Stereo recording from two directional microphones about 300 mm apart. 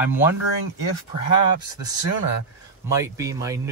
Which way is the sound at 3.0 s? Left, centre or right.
Centre.